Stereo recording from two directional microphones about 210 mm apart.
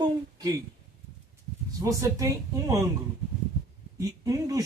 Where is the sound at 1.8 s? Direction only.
15° right (ahead or behind).